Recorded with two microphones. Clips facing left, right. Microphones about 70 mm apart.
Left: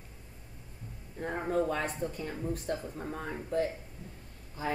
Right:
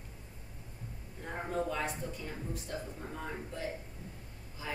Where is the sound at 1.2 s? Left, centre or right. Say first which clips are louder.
Left 5 dB; left.